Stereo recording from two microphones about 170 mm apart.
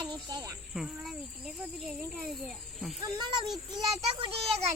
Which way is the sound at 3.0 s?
25° right (ahead or behind).